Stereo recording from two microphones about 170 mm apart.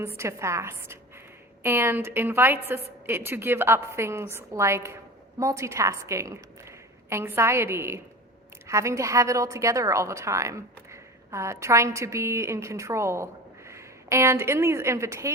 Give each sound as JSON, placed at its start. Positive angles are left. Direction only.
{"t": 0.0, "sound": "a woman's voice", "side_deg": -15}